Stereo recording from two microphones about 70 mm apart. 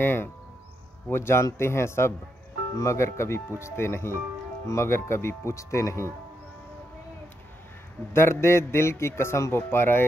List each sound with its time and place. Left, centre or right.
0.0 s speech: left
8.1 s speech: left